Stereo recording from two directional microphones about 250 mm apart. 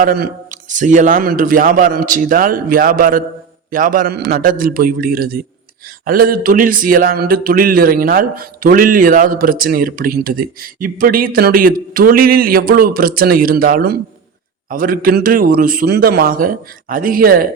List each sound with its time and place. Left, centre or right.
0.0 s speech: right